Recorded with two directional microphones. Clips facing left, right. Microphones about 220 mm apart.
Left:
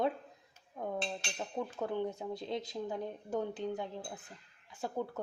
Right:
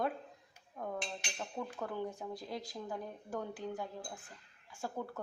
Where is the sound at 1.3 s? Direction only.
20° left (ahead or behind).